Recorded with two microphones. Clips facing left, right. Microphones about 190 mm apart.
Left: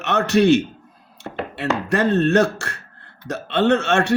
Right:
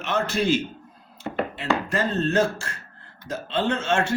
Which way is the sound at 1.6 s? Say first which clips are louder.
Left 6 dB; 70° left (ahead or behind).